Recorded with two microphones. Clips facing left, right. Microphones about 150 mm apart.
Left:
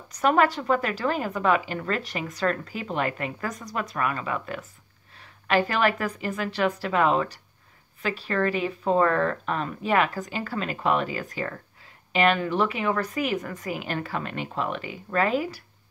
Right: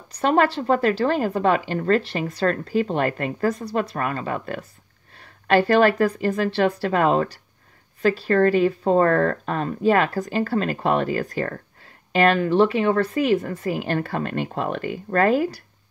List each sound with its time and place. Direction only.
0.1 s speech: 30° right (ahead or behind)